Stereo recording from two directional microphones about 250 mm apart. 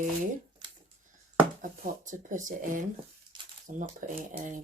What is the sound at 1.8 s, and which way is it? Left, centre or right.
Speech, right.